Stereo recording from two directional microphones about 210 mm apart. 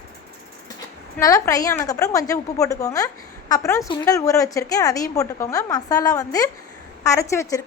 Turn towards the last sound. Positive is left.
turn(degrees=15)  # may be behind; listen again after turning